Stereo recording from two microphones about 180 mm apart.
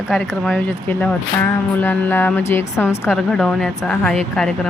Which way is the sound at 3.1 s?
Centre (ahead or behind).